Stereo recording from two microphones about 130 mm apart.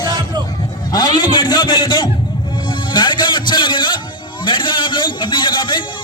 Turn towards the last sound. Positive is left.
turn(degrees=35)  # may be behind; listen again after turning